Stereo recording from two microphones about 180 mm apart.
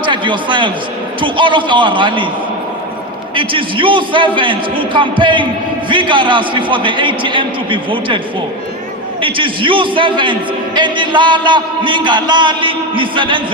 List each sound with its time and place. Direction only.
0.0 s a man's voice: 25° right (ahead or behind)
3.3 s a man's voice: 30° right (ahead or behind)
9.2 s a man's voice: 30° right (ahead or behind)